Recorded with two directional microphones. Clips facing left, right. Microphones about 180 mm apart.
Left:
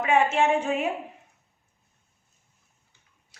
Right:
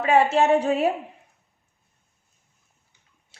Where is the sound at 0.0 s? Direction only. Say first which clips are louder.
Right 3 dB; 35° right (ahead or behind).